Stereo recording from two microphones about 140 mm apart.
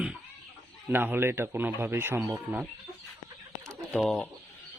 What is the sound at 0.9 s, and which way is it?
Speech, 15° right (ahead or behind).